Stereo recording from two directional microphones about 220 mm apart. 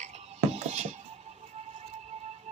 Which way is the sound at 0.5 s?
30° right (ahead or behind).